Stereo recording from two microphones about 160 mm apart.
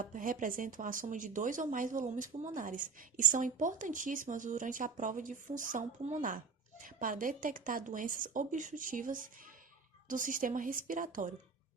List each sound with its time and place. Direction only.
0.0 s speech: 55° right (ahead or behind)